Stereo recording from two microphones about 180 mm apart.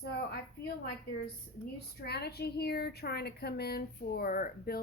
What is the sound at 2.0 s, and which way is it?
A woman's voice, 65° left (ahead or behind).